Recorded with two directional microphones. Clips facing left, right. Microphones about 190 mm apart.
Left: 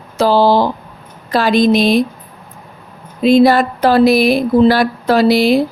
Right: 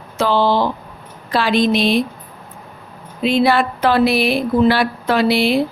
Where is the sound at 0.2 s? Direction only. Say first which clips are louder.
Left 5 dB; 35° left (ahead or behind).